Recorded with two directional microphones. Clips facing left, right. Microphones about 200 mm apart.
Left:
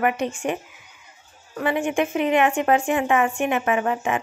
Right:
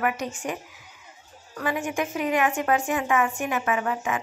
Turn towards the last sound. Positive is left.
turn(degrees=25)  # may be behind; listen again after turning